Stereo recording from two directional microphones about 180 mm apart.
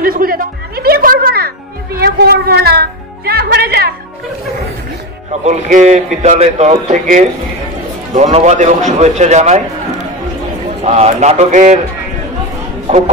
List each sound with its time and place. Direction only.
0.0 s a sound: 50° right (ahead or behind)
2.0 s music: 60° right (ahead or behind)
5.4 s a man's voice: 40° right (ahead or behind)
10.8 s a man's voice: 35° right (ahead or behind)
12.8 s speech: 40° right (ahead or behind)